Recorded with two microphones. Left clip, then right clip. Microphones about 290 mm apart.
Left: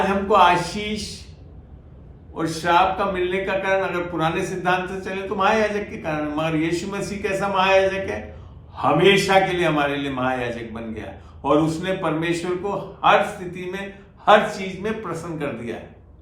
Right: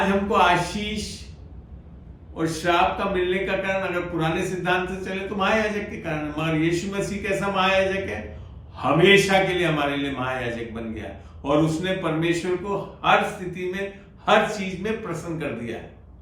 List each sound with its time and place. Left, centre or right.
0.0 s a man's voice: centre
2.3 s a man's voice: centre